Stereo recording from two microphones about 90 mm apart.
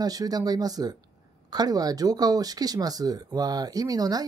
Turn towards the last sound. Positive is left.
turn(degrees=-45)  # may be behind; listen again after turning